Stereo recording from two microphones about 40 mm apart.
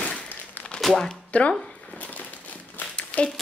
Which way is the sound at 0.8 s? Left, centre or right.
Centre.